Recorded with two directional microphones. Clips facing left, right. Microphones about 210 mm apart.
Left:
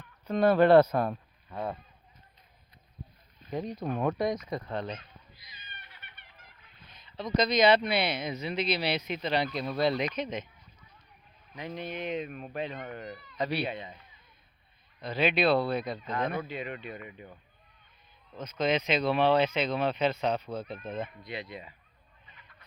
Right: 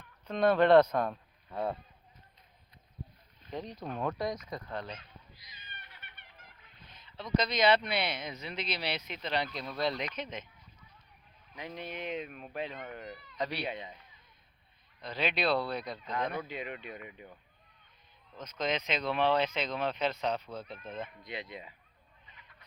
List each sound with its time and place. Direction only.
0.3 s speech: 5° left (ahead or behind)
3.5 s speech: 10° left (ahead or behind)
4.0 s speech: 20° left (ahead or behind)
5.9 s chicken: 50° right (ahead or behind)
6.8 s speech: 15° left (ahead or behind)
11.5 s speech: 5° right (ahead or behind)
13.7 s speech: 15° right (ahead or behind)
15.0 s speech: 5° left (ahead or behind)
16.5 s speech: 10° right (ahead or behind)
18.3 s speech: 5° left (ahead or behind)
20.5 s speech: 55° left (ahead or behind)
21.2 s speech: 20° right (ahead or behind)